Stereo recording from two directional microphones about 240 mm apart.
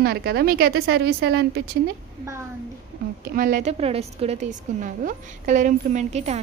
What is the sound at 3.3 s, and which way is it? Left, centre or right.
A woman's voice, right.